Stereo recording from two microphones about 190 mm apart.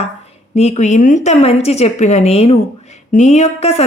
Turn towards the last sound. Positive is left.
turn(degrees=30)  # may be behind; listen again after turning